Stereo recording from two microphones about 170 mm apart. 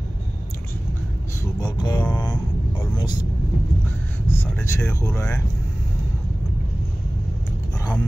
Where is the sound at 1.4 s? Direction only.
25° left (ahead or behind).